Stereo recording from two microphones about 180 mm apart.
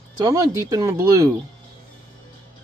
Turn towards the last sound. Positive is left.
turn(degrees=-15)  # may be behind; listen again after turning